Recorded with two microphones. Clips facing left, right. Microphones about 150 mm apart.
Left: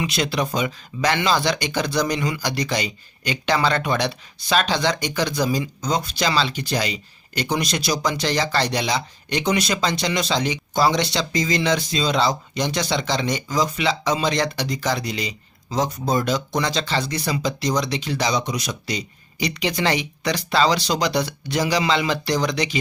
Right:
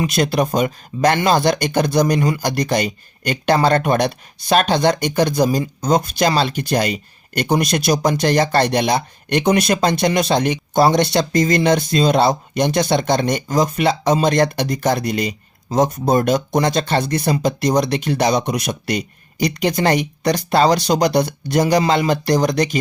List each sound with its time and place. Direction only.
0.0 s speech: 50° right (ahead or behind)